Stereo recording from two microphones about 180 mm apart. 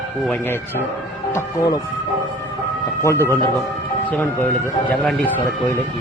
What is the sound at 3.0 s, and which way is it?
Speech, 15° left (ahead or behind).